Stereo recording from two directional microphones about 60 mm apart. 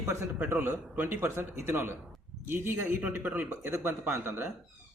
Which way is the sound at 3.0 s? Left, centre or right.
Right.